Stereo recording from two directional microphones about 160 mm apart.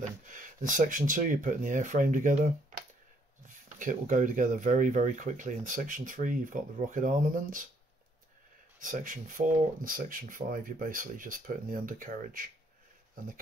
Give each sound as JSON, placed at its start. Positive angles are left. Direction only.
{"t": 0.0, "sound": "speech", "side_deg": -55}
{"t": 8.7, "sound": "speech", "side_deg": -55}